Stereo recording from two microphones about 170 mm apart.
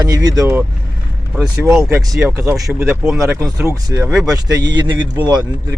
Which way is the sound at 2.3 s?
20° right (ahead or behind).